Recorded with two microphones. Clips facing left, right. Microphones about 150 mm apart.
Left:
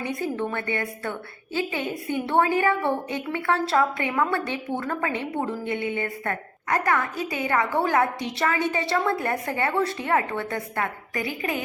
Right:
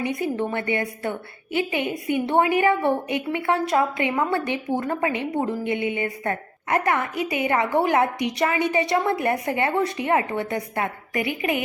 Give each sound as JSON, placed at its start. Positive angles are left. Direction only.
{"t": 0.0, "sound": "a woman's voice", "side_deg": -20}